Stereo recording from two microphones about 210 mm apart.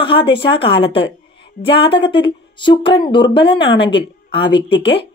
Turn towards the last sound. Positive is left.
turn(degrees=55)  # may be behind; listen again after turning